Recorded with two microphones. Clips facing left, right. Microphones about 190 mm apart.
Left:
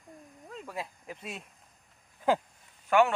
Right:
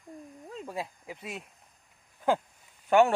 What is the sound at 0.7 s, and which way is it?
Speech, 10° right (ahead or behind).